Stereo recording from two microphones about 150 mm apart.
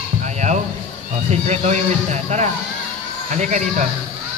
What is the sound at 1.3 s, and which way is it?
A man's voice, 50° right (ahead or behind).